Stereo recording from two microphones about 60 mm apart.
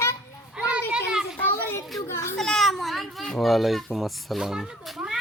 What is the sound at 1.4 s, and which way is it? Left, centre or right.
Children playing, left.